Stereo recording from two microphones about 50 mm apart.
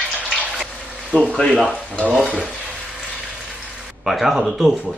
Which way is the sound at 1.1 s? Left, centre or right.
Left.